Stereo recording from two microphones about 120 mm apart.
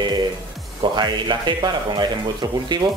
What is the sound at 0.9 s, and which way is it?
Speech, 40° right (ahead or behind).